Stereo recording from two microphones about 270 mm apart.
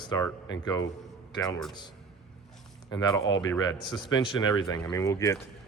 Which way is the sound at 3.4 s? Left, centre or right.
Centre.